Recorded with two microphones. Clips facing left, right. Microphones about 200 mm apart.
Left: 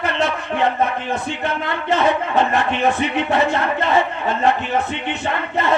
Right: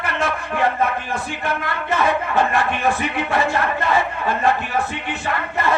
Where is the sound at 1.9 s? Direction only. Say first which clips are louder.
Left 2 dB; 20° left (ahead or behind).